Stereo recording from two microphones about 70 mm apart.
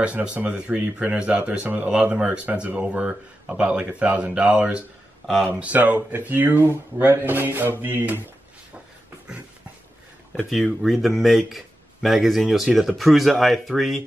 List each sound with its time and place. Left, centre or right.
0.0 s speech: centre
5.2 s speech: centre
5.6 s speech: right
10.3 s speech: centre